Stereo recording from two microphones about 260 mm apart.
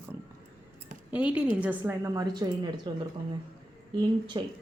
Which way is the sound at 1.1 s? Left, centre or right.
Centre.